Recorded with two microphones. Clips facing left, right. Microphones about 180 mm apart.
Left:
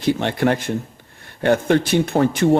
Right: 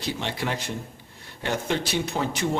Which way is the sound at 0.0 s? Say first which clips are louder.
Left 11 dB; 55° left (ahead or behind).